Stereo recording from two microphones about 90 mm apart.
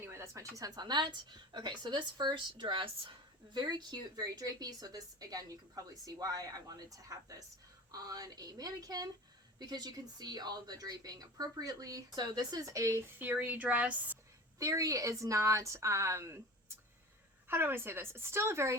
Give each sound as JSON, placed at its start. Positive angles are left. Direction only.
{"t": 0.0, "sound": "a woman's voice", "side_deg": -30}
{"t": 13.1, "sound": "speech", "side_deg": -20}
{"t": 14.6, "sound": "speech", "side_deg": -35}